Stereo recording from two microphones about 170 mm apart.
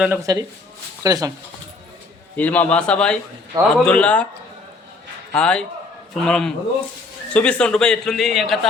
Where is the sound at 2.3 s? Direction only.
10° left (ahead or behind).